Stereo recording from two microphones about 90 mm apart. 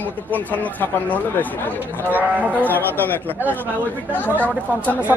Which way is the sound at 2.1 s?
15° right (ahead or behind).